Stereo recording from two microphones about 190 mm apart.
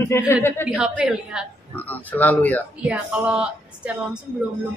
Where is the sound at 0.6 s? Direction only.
5° right (ahead or behind).